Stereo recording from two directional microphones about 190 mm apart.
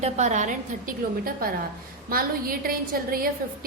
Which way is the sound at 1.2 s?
50° right (ahead or behind).